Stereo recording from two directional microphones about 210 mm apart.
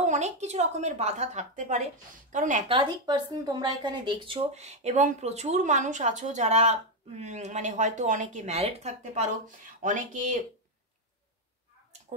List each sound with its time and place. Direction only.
0.0 s speech: 35° right (ahead or behind)
2.7 s speech: 20° right (ahead or behind); by 10.4 s 35° right (ahead or behind)